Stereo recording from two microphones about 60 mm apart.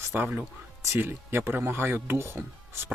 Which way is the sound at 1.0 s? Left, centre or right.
Right.